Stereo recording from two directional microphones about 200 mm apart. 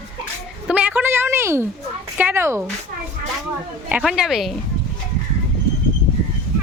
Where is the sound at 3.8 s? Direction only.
5° right (ahead or behind).